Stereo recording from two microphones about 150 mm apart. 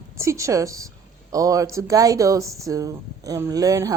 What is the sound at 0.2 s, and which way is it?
Speech, 20° right (ahead or behind).